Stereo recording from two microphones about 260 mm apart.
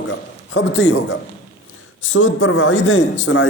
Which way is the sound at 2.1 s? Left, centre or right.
Left.